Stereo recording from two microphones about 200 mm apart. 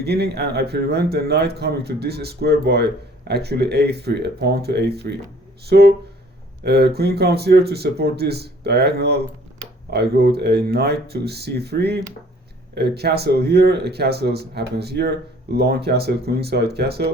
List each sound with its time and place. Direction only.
0.0 s a man's voice: 55° right (ahead or behind)